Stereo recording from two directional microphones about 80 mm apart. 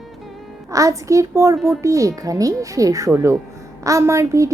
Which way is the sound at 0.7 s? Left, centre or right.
Right.